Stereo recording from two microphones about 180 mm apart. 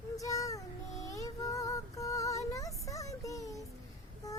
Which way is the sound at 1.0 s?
20° left (ahead or behind).